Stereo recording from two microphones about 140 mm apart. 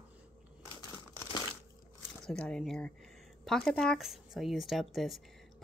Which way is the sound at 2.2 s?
5° left (ahead or behind).